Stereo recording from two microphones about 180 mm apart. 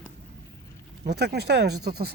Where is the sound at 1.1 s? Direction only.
65° right (ahead or behind).